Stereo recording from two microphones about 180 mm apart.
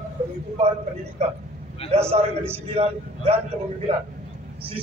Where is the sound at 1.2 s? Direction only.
40° right (ahead or behind).